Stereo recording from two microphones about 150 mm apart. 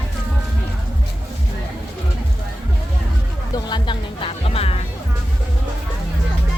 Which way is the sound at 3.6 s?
30° left (ahead or behind).